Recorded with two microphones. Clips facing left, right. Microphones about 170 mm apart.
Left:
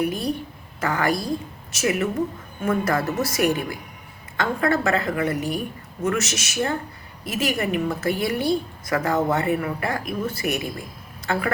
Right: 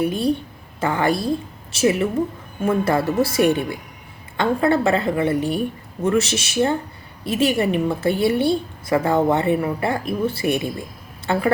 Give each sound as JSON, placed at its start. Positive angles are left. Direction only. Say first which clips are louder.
{"t": 0.0, "sound": "a woman's voice", "louder": "right 4 dB", "side_deg": -25}